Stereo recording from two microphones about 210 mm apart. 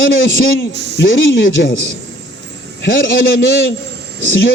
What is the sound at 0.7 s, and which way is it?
Speech, 55° right (ahead or behind).